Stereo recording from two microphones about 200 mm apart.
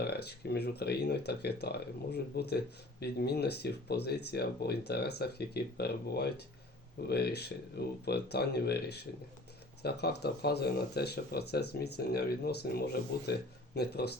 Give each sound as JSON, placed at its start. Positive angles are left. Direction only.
{"t": 0.0, "sound": "speech", "side_deg": 55}